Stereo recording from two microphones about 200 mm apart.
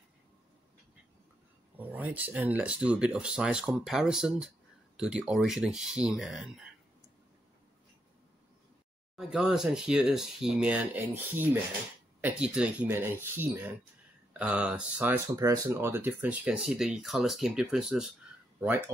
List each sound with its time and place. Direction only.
1.8 s speech: 10° right (ahead or behind)
9.1 s speech: 5° right (ahead or behind)